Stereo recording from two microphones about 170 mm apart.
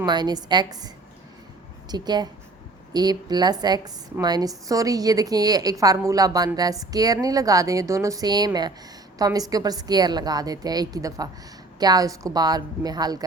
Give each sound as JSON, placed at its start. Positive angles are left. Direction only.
{"t": 0.0, "sound": "a woman's voice", "side_deg": -25}
{"t": 1.9, "sound": "a woman's voice", "side_deg": -25}